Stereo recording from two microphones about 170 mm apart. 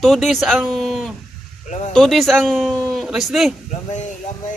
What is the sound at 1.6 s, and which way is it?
Speech, 45° left (ahead or behind).